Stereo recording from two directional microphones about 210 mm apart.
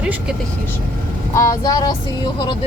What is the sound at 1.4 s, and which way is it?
Speech, 15° left (ahead or behind).